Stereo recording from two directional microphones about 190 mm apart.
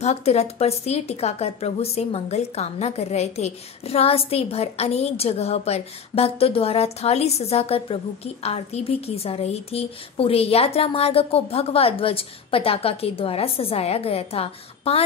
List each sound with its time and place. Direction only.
0.0 s speech: 35° left (ahead or behind)